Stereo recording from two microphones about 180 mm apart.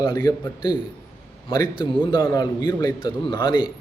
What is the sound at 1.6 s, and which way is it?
A man's voice, 30° left (ahead or behind).